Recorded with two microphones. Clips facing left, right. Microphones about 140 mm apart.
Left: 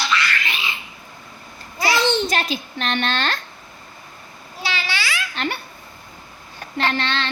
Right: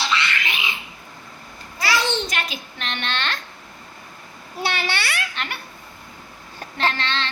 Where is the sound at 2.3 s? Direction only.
35° left (ahead or behind).